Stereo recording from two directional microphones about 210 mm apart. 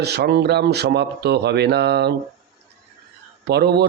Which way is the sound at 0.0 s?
50° right (ahead or behind).